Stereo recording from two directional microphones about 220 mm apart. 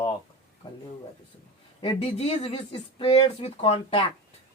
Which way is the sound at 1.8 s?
25° left (ahead or behind).